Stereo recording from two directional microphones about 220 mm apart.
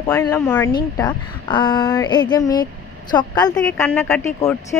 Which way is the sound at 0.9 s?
20° left (ahead or behind).